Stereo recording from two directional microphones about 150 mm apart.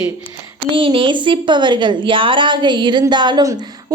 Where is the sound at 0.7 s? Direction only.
35° right (ahead or behind).